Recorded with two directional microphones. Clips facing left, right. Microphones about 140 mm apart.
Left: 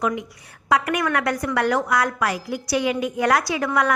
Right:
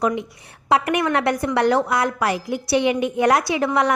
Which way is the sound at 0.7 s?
25° right (ahead or behind).